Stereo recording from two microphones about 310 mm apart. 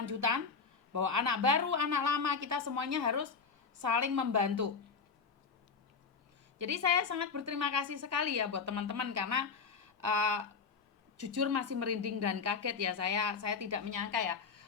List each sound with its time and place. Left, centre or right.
0.0 s a sound: right
0.9 s a woman's voice: right
6.6 s a woman's voice: right
11.2 s a woman's voice: right